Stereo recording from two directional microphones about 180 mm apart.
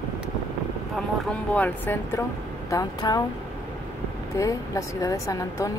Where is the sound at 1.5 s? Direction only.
10° left (ahead or behind).